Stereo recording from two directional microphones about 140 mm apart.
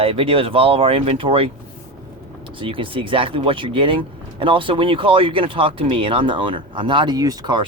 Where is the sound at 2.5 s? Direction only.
40° right (ahead or behind).